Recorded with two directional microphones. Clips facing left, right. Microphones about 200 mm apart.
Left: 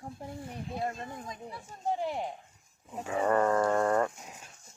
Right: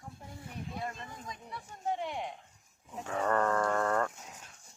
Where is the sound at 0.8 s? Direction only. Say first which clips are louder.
Left 7 dB; 30° left (ahead or behind).